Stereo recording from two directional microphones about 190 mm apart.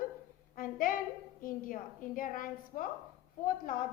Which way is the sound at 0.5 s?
45° left (ahead or behind).